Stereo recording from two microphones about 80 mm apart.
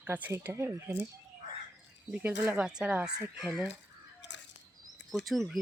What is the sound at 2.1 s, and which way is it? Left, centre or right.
Speech, right.